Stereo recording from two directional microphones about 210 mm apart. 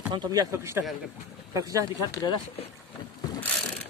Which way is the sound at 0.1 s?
20° right (ahead or behind).